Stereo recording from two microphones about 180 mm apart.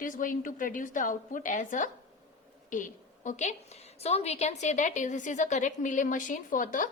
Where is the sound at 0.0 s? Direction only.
50° left (ahead or behind).